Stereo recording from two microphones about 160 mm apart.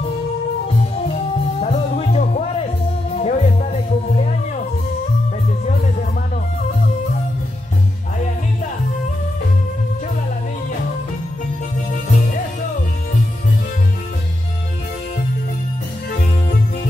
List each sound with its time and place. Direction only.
1.6 s music: 45° left (ahead or behind)